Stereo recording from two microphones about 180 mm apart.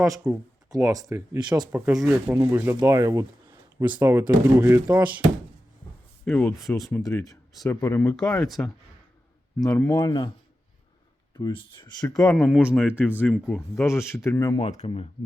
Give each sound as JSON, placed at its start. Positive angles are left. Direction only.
{"t": 0.0, "sound": "speech", "side_deg": -15}
{"t": 1.7, "sound": "speech", "side_deg": -5}
{"t": 6.2, "sound": "speech", "side_deg": 5}
{"t": 7.0, "sound": "speech", "side_deg": 20}
{"t": 9.9, "sound": "speech", "side_deg": 25}
{"t": 11.3, "sound": "speech", "side_deg": 25}
{"t": 12.1, "sound": "speech", "side_deg": 0}
{"t": 13.0, "sound": "speech", "side_deg": 10}
{"t": 13.8, "sound": "speech", "side_deg": 15}
{"t": 14.6, "sound": "speech", "side_deg": 35}